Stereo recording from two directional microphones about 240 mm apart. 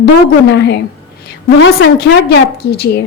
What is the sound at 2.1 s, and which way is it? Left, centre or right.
Speech, left.